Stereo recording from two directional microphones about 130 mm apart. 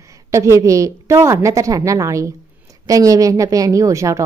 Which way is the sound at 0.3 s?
25° right (ahead or behind).